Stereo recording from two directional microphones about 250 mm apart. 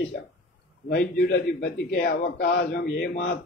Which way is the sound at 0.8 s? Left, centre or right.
Left.